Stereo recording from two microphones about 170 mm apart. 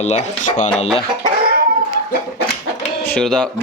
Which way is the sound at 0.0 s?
40° left (ahead or behind).